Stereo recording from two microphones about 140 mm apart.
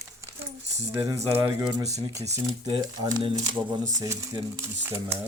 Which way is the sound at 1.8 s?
50° right (ahead or behind).